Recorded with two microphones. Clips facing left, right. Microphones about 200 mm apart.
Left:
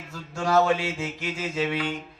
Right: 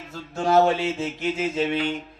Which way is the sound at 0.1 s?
25° right (ahead or behind).